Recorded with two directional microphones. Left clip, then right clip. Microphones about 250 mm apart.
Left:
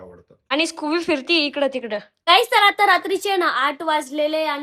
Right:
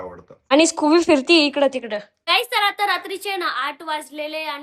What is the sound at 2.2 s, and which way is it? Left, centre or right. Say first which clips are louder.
A woman's voice: left 5 dB; centre.